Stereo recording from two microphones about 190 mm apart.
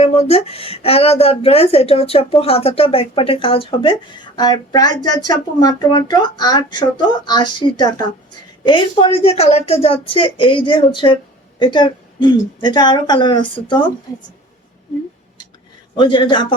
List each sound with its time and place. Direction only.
0.0 s a woman's voice: 35° left (ahead or behind)
16.0 s a woman's voice: 25° left (ahead or behind)